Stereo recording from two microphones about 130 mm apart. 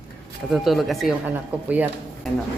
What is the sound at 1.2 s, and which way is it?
Speech, 10° right (ahead or behind).